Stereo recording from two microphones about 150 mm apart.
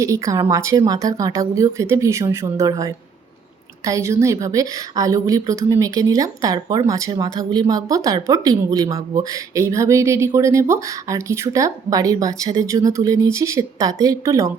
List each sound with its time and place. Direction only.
0.0 s a woman's voice: 20° right (ahead or behind)